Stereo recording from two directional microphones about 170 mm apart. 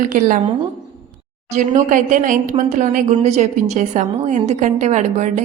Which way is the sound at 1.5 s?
45° right (ahead or behind).